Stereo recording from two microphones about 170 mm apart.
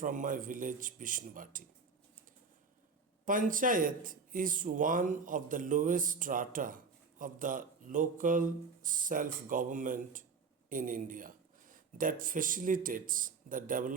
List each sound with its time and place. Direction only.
0.0 s speech: 50° right (ahead or behind)
3.2 s speech: 55° right (ahead or behind)